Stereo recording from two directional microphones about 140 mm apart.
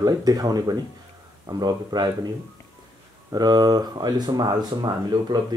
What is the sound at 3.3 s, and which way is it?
Speech, 30° right (ahead or behind).